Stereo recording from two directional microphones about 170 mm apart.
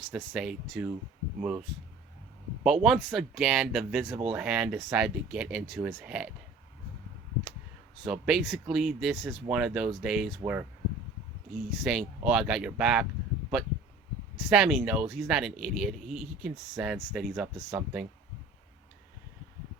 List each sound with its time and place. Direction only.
0.1 s speech: 5° right (ahead or behind)
2.6 s speech: centre (ahead or behind)
8.0 s speech: 5° right (ahead or behind)
14.3 s speech: 5° right (ahead or behind)